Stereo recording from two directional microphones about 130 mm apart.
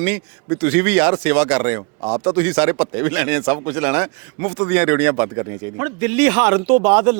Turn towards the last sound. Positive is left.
turn(degrees=-20)  # may be behind; listen again after turning